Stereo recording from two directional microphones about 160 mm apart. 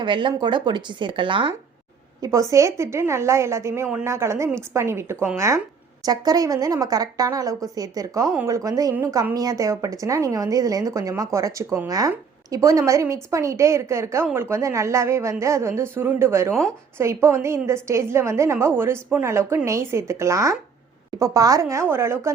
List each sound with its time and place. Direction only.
0.0 s a woman's voice: 30° right (ahead or behind)
2.2 s a woman's voice: 20° right (ahead or behind)